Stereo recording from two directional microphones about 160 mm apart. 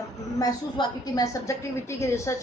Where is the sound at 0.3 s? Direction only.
25° left (ahead or behind).